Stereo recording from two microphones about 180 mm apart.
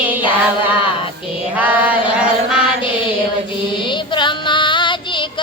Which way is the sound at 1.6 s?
10° right (ahead or behind).